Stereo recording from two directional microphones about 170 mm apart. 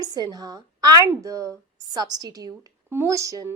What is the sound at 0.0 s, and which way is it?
A woman's voice, 20° right (ahead or behind).